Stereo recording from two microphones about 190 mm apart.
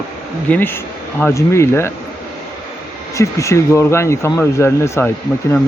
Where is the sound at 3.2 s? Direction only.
15° left (ahead or behind).